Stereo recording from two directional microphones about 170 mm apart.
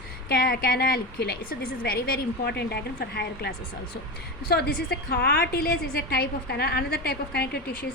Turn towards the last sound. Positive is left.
turn(degrees=70)  # may be behind; listen again after turning